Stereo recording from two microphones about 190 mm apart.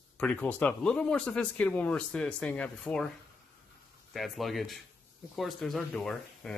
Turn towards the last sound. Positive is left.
turn(degrees=5)  # may be behind; listen again after turning